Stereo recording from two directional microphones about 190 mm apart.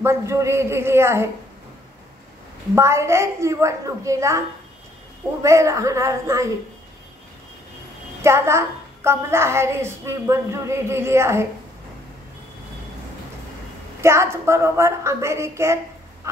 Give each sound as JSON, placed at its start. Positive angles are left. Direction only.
{"t": 0.0, "sound": "a woman's voice", "side_deg": -15}
{"t": 2.7, "sound": "a woman's voice", "side_deg": -15}
{"t": 5.4, "sound": "a woman's voice", "side_deg": -15}
{"t": 8.2, "sound": "a woman's voice", "side_deg": -15}
{"t": 14.0, "sound": "a woman's voice", "side_deg": -15}